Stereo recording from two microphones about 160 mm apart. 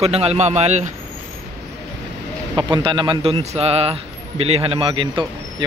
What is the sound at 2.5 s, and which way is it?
A man's voice, 30° right (ahead or behind).